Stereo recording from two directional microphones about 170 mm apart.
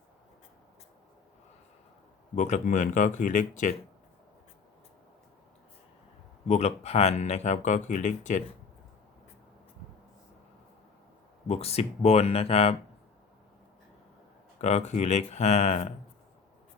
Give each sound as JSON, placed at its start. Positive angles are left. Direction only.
{"t": 2.3, "sound": "speech", "side_deg": 45}
{"t": 6.5, "sound": "speech", "side_deg": 40}
{"t": 11.4, "sound": "speech", "side_deg": 35}
{"t": 14.6, "sound": "speech", "side_deg": 40}